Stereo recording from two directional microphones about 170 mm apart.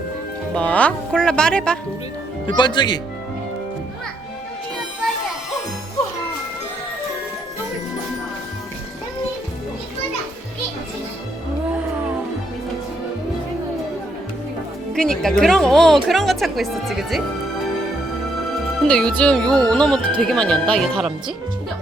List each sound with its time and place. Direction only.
0.5 s speech: 10° left (ahead or behind)
2.5 s speech: 25° left (ahead or behind)
14.9 s speech: 5° left (ahead or behind)
18.9 s speech: 5° left (ahead or behind)